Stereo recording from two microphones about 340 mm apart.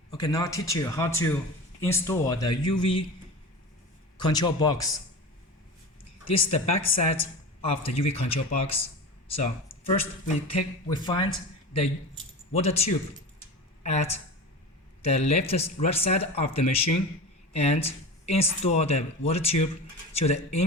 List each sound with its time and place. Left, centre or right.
0.1 s speech: centre
4.2 s speech: centre
6.3 s speech: centre
12.5 s speech: centre